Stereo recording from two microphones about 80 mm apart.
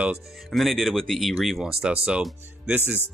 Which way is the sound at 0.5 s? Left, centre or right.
Centre.